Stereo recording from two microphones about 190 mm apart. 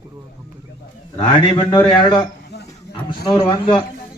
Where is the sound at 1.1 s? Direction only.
25° left (ahead or behind).